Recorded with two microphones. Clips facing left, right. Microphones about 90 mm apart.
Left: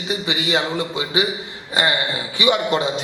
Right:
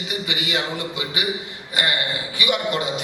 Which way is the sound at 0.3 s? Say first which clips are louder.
Left 5 dB; 25° left (ahead or behind).